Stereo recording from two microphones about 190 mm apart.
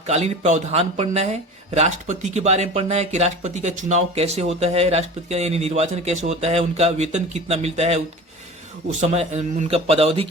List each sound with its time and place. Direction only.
0.0 s speech: 35° right (ahead or behind)